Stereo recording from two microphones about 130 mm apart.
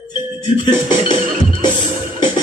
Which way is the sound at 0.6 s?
35° left (ahead or behind).